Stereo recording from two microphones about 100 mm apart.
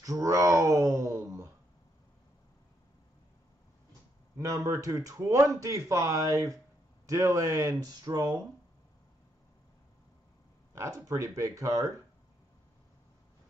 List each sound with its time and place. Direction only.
0.0 s a sound: 35° right (ahead or behind)
4.4 s speech: 30° right (ahead or behind)
10.7 s speech: 35° right (ahead or behind)